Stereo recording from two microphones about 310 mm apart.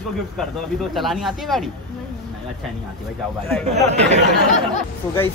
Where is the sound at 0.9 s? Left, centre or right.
Centre.